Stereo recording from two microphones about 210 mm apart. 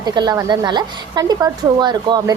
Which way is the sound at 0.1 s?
20° right (ahead or behind).